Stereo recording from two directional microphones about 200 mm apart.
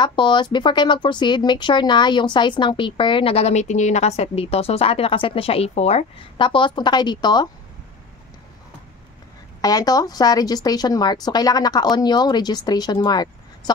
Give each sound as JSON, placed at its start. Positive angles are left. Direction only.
{"t": 0.0, "sound": "speech", "side_deg": 25}
{"t": 9.6, "sound": "speech", "side_deg": 20}